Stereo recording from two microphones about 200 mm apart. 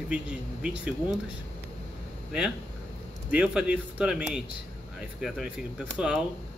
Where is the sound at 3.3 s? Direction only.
5° right (ahead or behind).